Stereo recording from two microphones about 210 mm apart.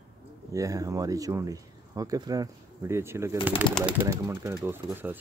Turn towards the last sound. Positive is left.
turn(degrees=-10)  # may be behind; listen again after turning